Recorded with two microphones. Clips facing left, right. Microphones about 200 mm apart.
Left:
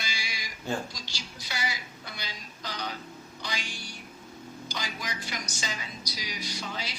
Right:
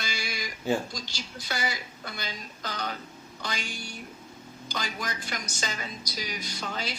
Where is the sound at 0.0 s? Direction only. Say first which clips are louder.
Right 4 dB; 45° right (ahead or behind).